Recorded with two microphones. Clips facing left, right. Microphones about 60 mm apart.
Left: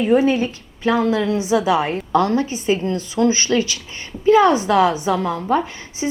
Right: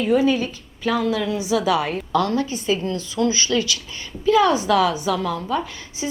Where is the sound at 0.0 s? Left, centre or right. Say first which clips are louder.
Left 3 dB; left.